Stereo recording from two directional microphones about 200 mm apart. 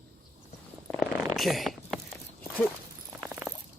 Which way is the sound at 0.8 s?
5° left (ahead or behind).